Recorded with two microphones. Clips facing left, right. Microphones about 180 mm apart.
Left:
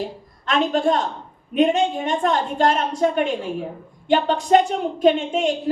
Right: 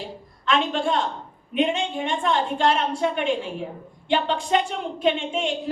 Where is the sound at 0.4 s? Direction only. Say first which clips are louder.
Left 4 dB; 40° left (ahead or behind).